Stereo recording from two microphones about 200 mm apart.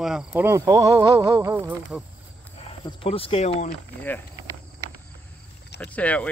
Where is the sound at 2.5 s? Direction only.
25° left (ahead or behind).